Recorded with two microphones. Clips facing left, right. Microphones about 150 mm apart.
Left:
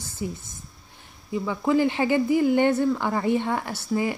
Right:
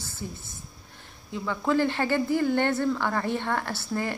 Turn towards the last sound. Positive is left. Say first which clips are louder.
# left 4 dB
turn(degrees=10)  # may be behind; listen again after turning